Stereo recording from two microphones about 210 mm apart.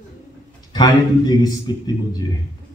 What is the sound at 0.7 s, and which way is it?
Speech, 20° left (ahead or behind).